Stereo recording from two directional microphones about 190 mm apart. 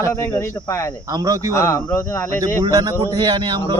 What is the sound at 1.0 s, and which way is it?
Speech, 20° right (ahead or behind).